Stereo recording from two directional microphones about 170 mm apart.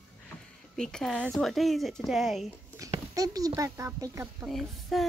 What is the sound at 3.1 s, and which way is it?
A child's voice, 20° right (ahead or behind).